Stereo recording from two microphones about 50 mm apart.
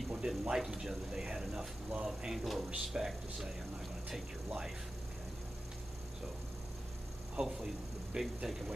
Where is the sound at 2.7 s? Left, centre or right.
Centre.